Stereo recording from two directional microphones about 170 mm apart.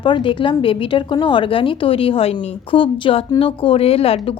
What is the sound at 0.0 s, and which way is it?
A woman's voice, 30° left (ahead or behind).